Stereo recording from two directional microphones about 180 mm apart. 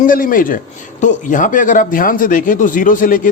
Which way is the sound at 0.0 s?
50° left (ahead or behind).